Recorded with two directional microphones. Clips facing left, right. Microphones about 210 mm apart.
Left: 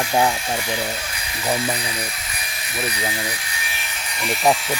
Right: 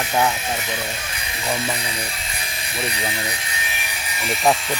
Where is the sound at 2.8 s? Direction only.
25° right (ahead or behind).